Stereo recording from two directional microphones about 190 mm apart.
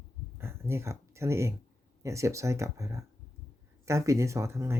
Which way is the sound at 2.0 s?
15° right (ahead or behind).